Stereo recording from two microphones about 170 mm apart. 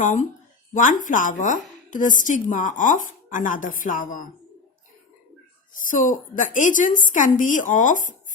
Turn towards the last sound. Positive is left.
turn(degrees=50)  # may be behind; listen again after turning